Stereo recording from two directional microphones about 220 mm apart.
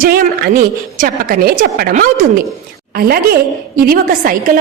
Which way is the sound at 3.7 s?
40° right (ahead or behind).